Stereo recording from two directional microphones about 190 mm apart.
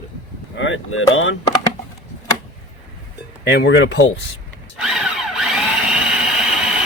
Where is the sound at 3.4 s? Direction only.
65° left (ahead or behind).